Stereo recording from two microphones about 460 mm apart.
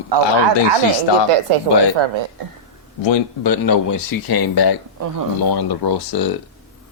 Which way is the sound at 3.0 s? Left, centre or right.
Left.